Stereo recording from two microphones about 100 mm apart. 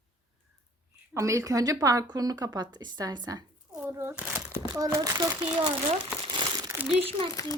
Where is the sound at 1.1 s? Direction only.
30° right (ahead or behind).